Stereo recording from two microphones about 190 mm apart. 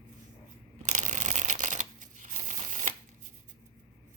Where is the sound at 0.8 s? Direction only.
40° right (ahead or behind).